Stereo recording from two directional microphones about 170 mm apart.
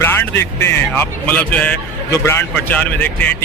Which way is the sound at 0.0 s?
15° left (ahead or behind).